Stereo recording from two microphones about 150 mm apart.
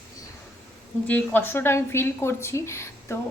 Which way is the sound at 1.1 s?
10° left (ahead or behind).